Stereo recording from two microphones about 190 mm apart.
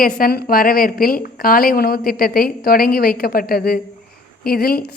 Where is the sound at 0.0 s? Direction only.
50° left (ahead or behind).